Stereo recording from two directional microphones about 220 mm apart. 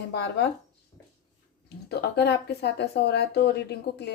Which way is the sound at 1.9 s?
50° left (ahead or behind).